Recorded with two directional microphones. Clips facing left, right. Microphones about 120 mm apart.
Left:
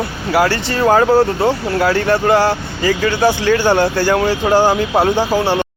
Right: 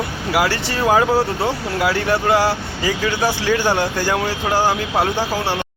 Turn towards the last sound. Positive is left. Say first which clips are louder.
# left 6 dB
turn(degrees=25)  # may be behind; listen again after turning